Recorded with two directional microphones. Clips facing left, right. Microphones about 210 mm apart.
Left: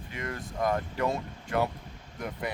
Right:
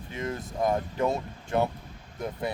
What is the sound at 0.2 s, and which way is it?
Speech, 25° right (ahead or behind).